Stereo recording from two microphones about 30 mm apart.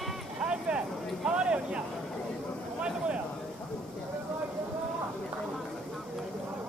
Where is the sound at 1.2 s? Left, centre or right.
Right.